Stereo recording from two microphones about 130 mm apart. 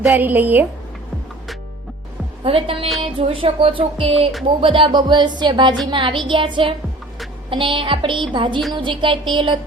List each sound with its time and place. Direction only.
0.1 s speech: 15° right (ahead or behind)
2.4 s music: 45° right (ahead or behind)